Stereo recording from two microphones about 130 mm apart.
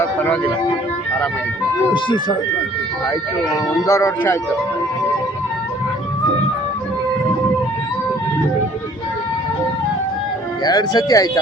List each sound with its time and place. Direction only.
0.0 s music: 15° left (ahead or behind)
1.9 s speech: 35° left (ahead or behind)
3.8 s speech: 25° left (ahead or behind)
10.6 s speech: 30° left (ahead or behind)